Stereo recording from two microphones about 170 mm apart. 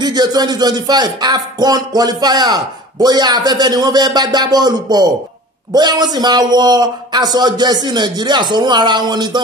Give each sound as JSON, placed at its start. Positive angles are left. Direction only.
{"t": 0.0, "sound": "speech", "side_deg": -25}